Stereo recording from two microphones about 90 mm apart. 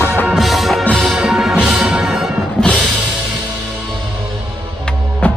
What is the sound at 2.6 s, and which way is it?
Music, 10° left (ahead or behind).